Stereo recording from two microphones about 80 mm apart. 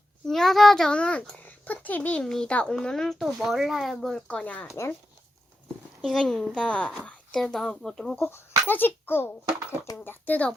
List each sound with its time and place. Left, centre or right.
0.3 s a child's voice: centre
4.1 s a child's voice: centre
6.0 s a child's voice: centre
8.2 s a child's voice: left